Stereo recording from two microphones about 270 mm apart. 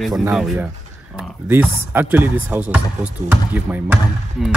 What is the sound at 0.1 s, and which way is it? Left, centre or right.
Speech, centre.